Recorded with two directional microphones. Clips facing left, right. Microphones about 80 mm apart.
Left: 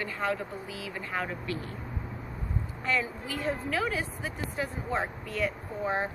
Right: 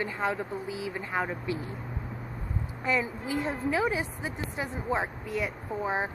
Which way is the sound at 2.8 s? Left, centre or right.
Centre.